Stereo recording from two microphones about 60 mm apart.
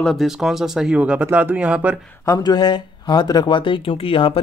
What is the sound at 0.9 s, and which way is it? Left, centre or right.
Speech, right.